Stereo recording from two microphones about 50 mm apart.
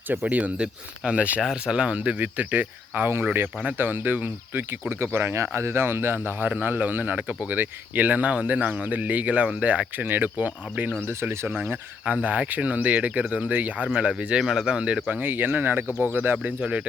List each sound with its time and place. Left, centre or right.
0.1 s speech: right
4.9 s speech: right
10.1 s speech: right
11.0 s speech: right
12.0 s speech: right
13.8 s speech: centre
14.4 s speech: centre
15.2 s speech: right
15.9 s speech: left
16.1 s speech: right